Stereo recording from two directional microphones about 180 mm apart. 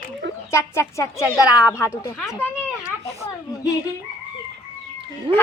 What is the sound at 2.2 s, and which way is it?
Speech, 5° left (ahead or behind).